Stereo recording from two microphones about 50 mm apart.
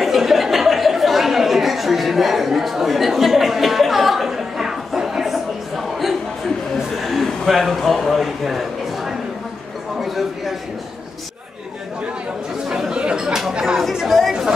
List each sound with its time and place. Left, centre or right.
0.0 s chatter: centre
6.8 s a sound: centre
12.6 s chatter: centre
14.0 s chatter: centre